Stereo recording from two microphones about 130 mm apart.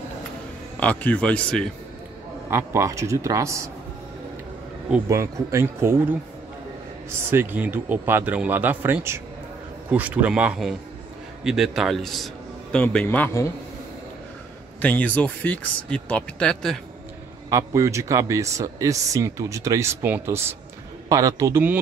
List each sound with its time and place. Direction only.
0.7 s speech: 10° left (ahead or behind)
2.5 s speech: 25° right (ahead or behind)
5.0 s speech: 25° right (ahead or behind)
7.1 s a man's voice: 15° right (ahead or behind); by 13.3 s 10° left (ahead or behind)
14.8 s speech: 10° left (ahead or behind)
17.5 s speech: 25° right (ahead or behind)